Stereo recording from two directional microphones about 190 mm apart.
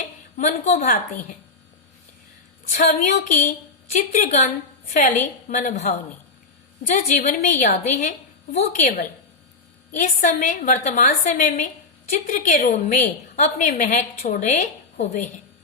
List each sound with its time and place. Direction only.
0.3 s a woman's voice: 40° left (ahead or behind)
2.6 s a woman's voice: 40° left (ahead or behind)